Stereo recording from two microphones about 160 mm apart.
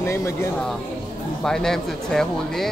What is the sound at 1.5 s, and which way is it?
Speech, 5° left (ahead or behind).